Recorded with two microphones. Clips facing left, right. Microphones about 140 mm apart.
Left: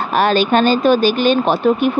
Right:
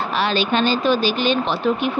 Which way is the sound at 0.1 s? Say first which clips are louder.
Left 7 dB; 50° left (ahead or behind).